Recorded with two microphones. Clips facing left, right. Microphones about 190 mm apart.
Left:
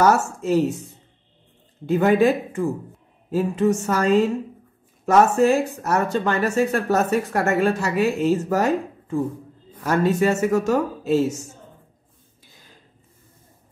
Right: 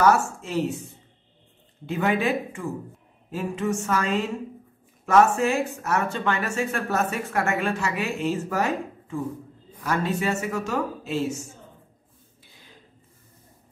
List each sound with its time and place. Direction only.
0.0 s speech: 40° left (ahead or behind)
1.9 s speech: 40° left (ahead or behind)